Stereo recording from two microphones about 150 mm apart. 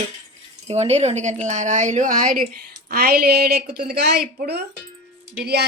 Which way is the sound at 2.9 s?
85° right.